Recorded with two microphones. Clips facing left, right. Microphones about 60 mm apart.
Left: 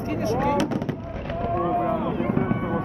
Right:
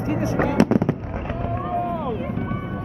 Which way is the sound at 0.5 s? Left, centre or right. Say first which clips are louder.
Right 6 dB; right.